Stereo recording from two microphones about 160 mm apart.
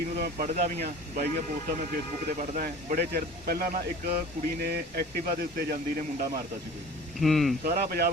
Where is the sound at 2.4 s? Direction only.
55° right (ahead or behind).